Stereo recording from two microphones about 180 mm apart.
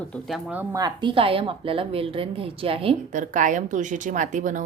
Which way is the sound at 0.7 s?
20° right (ahead or behind).